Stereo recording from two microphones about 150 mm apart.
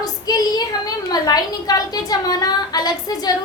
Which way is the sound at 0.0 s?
25° left (ahead or behind).